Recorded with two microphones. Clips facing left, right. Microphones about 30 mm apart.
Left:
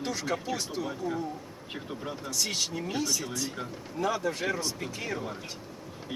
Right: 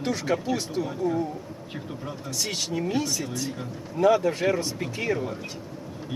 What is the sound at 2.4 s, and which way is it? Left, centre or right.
Speech, centre.